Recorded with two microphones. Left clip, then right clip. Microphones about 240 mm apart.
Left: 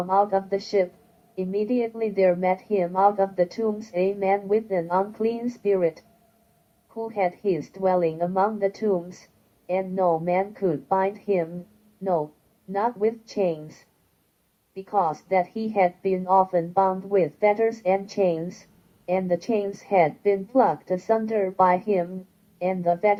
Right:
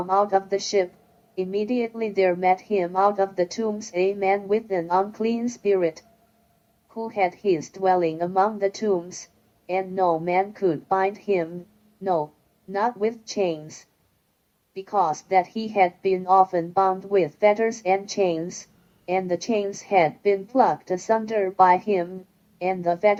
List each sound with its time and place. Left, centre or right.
0.1 s a woman's voice: right
12.7 s a woman's voice: right